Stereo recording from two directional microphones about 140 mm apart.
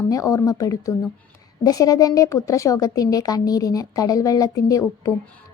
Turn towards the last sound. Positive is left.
turn(degrees=25)  # may be behind; listen again after turning